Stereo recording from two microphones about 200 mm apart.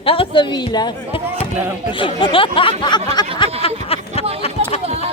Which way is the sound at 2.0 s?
25° left (ahead or behind).